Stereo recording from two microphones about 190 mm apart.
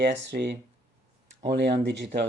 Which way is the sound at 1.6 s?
60° right (ahead or behind).